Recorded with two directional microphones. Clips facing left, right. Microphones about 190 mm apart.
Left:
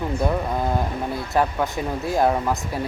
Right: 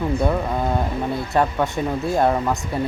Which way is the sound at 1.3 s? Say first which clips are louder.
Right 1 dB; 5° left (ahead or behind).